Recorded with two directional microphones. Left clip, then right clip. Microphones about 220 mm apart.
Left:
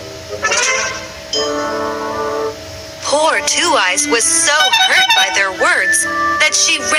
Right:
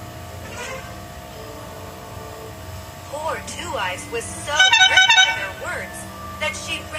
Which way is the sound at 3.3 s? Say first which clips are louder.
Left 14 dB; 40° left (ahead or behind).